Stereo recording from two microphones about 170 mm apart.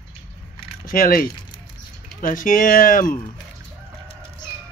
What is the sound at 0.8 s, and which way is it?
Speech, 60° left (ahead or behind).